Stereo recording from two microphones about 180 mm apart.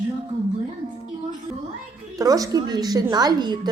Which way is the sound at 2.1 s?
20° right (ahead or behind).